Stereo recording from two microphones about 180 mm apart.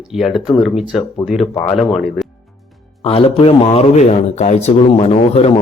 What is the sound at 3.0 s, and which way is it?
Speech, 30° left (ahead or behind).